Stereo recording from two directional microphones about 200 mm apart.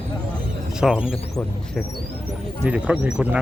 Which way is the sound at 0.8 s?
5° right (ahead or behind).